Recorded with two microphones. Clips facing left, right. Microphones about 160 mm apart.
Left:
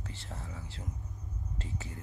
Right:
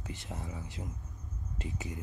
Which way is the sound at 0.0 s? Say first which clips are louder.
Right 3 dB; 15° right (ahead or behind).